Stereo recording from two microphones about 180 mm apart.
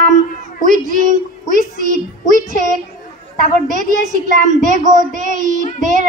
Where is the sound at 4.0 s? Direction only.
45° right (ahead or behind).